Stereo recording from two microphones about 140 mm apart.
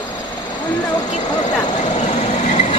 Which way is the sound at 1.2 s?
30° left (ahead or behind).